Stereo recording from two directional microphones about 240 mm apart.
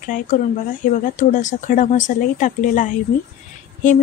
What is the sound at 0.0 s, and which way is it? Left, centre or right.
Speech, left.